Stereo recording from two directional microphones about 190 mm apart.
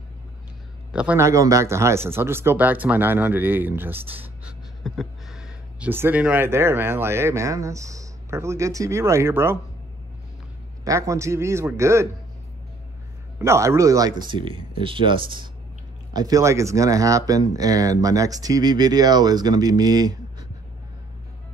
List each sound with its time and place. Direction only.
0.9 s speech: 10° right (ahead or behind)
10.8 s speech: 15° right (ahead or behind)
13.4 s speech: 15° right (ahead or behind)